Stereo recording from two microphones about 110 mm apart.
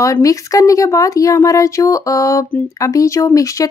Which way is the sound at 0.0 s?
30° left (ahead or behind).